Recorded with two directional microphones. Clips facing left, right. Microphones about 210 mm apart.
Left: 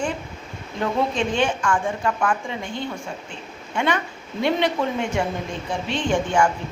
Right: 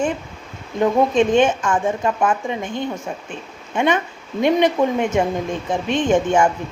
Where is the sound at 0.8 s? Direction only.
20° right (ahead or behind).